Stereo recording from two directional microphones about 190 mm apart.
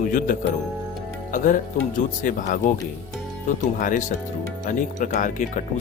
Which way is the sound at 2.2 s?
45° left (ahead or behind).